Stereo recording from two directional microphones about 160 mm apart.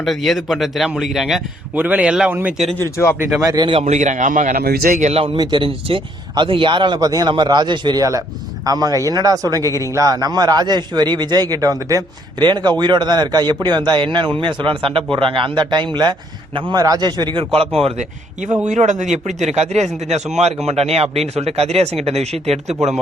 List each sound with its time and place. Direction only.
0.0 s a man's voice: centre (ahead or behind)
2.7 s speech: 15° left (ahead or behind)
3.2 s speech: 10° right (ahead or behind)
3.4 s speech: 25° right (ahead or behind)
3.8 s a man's voice: 50° right (ahead or behind)
4.6 s a man's voice: 65° right (ahead or behind); by 5.2 s 50° right (ahead or behind)
5.2 s speech: 30° right (ahead or behind)
18.7 s a man's voice: 50° right (ahead or behind)